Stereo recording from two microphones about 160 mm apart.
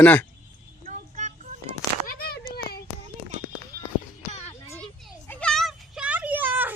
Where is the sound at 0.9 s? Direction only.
50° right (ahead or behind).